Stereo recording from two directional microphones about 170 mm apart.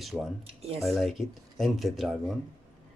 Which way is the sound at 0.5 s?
35° right (ahead or behind).